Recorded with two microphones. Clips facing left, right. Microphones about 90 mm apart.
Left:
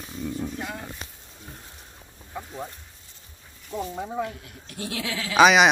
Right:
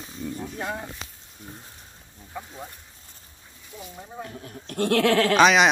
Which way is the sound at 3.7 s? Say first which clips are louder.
Left 10 dB; 90° left.